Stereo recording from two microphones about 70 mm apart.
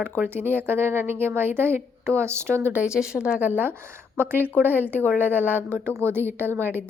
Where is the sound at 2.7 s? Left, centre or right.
Centre.